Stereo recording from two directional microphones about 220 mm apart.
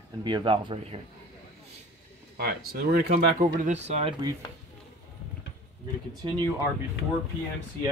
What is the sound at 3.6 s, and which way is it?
Speech, 30° right (ahead or behind).